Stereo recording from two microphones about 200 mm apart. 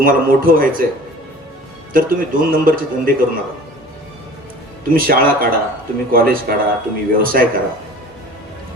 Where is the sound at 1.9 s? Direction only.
45° right (ahead or behind).